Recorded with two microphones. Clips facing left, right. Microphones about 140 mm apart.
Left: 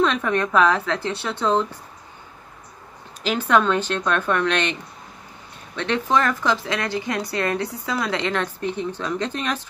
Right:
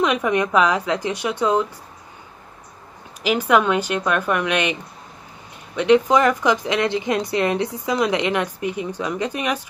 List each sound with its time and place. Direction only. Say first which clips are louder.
0.0 s speech: right 1 dB; 15° right (ahead or behind)
3.2 s speech: right 2 dB; 10° right (ahead or behind)
5.8 s a woman's voice: right 6 dB; 15° right (ahead or behind)